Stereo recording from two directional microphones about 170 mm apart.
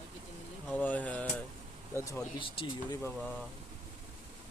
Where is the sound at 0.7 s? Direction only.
10° left (ahead or behind).